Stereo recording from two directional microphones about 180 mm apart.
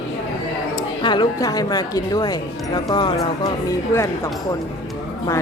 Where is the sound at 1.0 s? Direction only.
25° left (ahead or behind).